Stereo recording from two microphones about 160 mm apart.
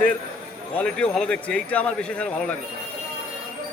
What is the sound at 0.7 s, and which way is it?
A man's voice, 5° left (ahead or behind).